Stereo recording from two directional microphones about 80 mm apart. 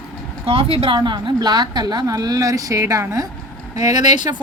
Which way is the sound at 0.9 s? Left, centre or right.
Right.